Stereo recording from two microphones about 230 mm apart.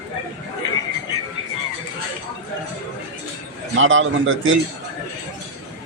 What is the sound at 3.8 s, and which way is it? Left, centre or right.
Speech, right.